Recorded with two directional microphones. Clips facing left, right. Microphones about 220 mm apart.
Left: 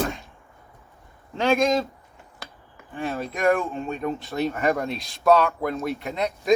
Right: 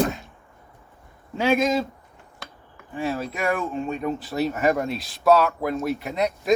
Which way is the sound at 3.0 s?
Centre (ahead or behind).